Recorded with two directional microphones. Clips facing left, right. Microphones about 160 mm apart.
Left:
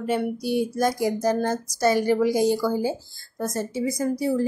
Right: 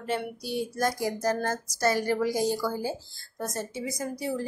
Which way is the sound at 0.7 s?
15° left (ahead or behind).